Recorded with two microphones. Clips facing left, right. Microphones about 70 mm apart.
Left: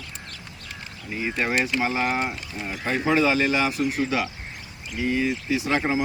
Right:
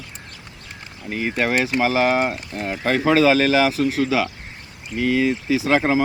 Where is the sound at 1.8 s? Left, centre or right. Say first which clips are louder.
Right 6 dB; right.